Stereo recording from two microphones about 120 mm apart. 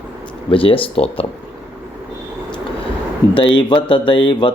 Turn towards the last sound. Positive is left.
turn(degrees=40)  # may be behind; listen again after turning